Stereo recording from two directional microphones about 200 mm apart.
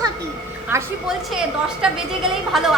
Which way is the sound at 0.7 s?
15° right (ahead or behind).